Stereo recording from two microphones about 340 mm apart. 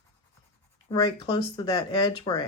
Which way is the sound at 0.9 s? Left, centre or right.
Centre.